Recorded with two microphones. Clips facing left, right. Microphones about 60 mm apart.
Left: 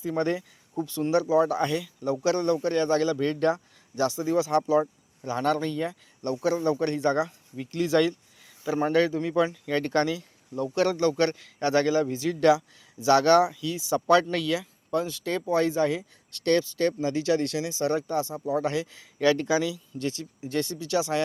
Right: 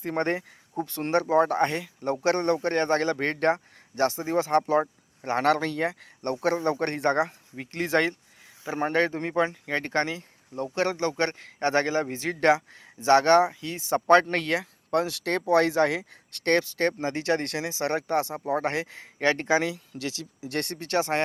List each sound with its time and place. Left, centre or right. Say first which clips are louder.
0.0 s a man's voice: even; right
16.4 s a man's voice: even; right
19.9 s speech: left 3 dB; right